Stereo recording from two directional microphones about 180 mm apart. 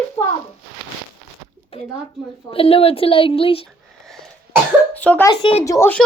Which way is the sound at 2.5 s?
30° left (ahead or behind).